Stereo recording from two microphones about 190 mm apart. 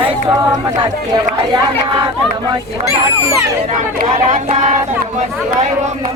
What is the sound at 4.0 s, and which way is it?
Speech, 40° right (ahead or behind).